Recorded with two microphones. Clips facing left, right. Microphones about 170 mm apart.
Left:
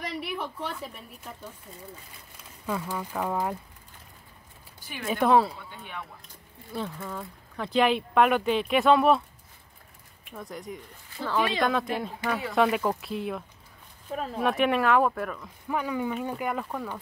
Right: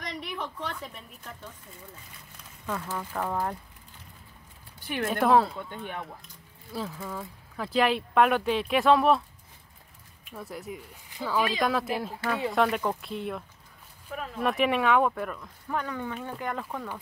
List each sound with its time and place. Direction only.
0.0 s a woman's voice: 5° left (ahead or behind)
2.6 s speech: 10° left (ahead or behind)
4.7 s a sound: 60° right (ahead or behind)
5.0 s speech: centre (ahead or behind)
6.7 s speech: centre (ahead or behind)
10.3 s speech: 5° right (ahead or behind)
14.1 s speech: 35° left (ahead or behind)
14.4 s speech: centre (ahead or behind)